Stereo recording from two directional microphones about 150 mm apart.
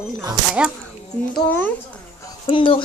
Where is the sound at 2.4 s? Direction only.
35° left (ahead or behind).